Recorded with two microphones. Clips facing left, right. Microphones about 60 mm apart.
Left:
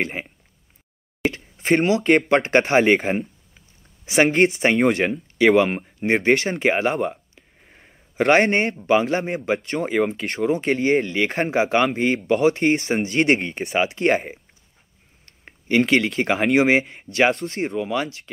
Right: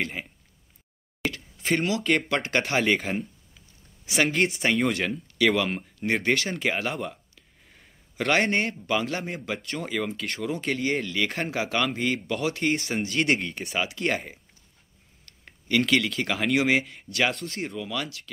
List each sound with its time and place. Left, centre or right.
0.0 s speech: left
1.3 s a sound: left
2.0 s speech: left
2.8 s speech: left
4.0 s speech: left
4.6 s speech: left
5.6 s speech: left
7.1 s a sound: left
8.5 s speech: left
8.8 s speech: left
13.7 s speech: left
15.2 s a sound: left
16.5 s speech: left